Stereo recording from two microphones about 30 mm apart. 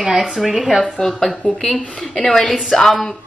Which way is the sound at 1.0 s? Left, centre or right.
Centre.